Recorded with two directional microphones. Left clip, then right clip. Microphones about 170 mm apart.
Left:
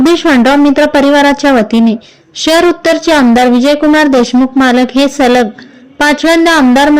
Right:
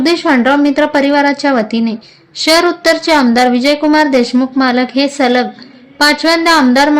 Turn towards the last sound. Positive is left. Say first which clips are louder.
# left 2 dB
turn(degrees=30)  # may be behind; listen again after turning